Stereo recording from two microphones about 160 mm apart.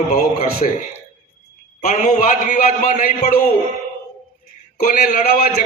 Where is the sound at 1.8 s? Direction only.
50° left (ahead or behind).